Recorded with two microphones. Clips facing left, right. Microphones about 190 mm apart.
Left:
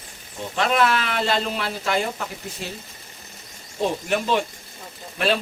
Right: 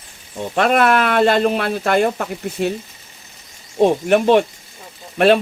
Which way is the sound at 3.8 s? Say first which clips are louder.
Right 9 dB; 55° right (ahead or behind).